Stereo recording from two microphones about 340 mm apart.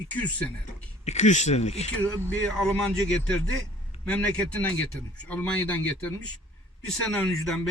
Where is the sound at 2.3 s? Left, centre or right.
Centre.